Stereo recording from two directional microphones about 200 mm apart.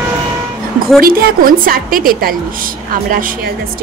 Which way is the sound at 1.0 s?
45° right (ahead or behind).